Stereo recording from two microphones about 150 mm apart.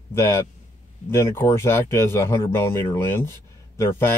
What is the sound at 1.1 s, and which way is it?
Speech, 15° left (ahead or behind).